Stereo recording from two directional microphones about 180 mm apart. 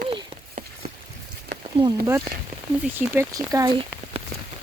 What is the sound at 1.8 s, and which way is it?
Speech, 20° right (ahead or behind).